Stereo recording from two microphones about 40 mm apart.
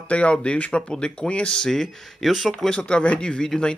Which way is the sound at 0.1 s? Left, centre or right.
Left.